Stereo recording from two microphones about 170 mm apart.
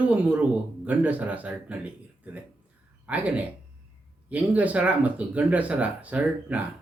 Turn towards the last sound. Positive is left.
turn(degrees=-10)  # may be behind; listen again after turning